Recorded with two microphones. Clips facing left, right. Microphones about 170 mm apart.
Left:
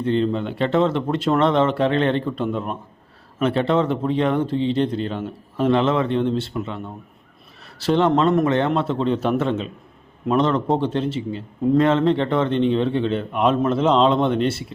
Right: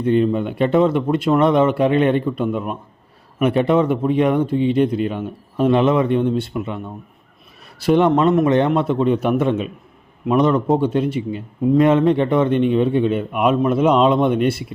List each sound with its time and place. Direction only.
0.0 s a man's voice: 15° right (ahead or behind)